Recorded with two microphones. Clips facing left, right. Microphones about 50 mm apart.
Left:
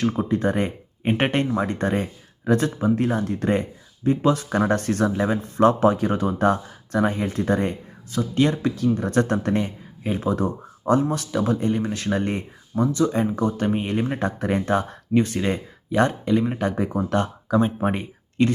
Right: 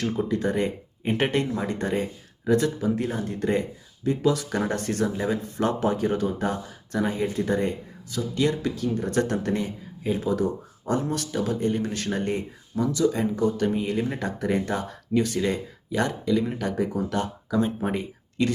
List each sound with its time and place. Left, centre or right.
0.3 s speech: left
5.4 s speech: left